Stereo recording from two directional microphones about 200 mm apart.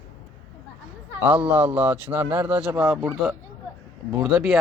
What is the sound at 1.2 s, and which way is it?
A man's voice, 10° right (ahead or behind).